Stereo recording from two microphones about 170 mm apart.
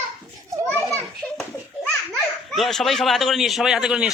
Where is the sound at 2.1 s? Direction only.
Centre (ahead or behind).